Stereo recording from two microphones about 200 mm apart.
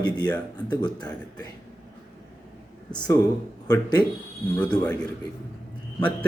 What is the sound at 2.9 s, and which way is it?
A man's voice, 20° left (ahead or behind).